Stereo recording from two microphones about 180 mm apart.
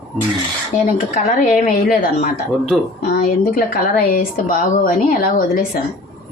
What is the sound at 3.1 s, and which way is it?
A woman's voice, 55° left (ahead or behind).